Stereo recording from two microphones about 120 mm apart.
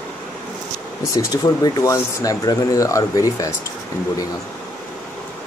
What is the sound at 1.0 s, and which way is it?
Speech, 25° left (ahead or behind).